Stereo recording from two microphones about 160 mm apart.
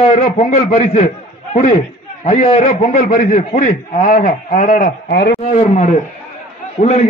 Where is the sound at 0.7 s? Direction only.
45° left (ahead or behind).